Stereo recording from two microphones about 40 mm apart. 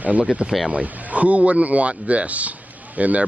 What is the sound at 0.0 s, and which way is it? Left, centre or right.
Speech, right.